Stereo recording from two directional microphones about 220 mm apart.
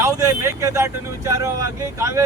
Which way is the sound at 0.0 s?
10° right (ahead or behind).